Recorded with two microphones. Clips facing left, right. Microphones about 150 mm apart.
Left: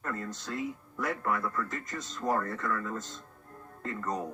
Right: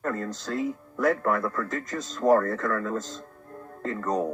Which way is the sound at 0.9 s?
65° right (ahead or behind).